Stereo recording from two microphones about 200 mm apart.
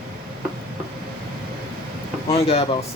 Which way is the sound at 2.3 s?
30° left (ahead or behind).